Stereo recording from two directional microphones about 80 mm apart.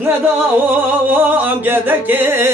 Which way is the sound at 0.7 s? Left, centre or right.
Right.